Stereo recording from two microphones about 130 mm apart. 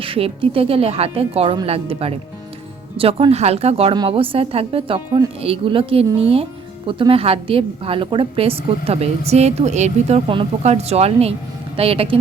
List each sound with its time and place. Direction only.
0.0 s a woman's voice: 45° right (ahead or behind)